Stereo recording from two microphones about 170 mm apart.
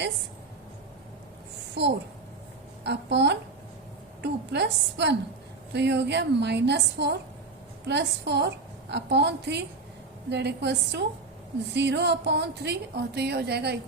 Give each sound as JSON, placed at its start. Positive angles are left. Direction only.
{"t": 1.8, "sound": "a woman's voice", "side_deg": -80}